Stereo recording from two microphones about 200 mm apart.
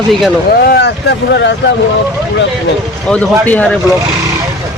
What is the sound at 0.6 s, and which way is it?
Speech, 55° left (ahead or behind).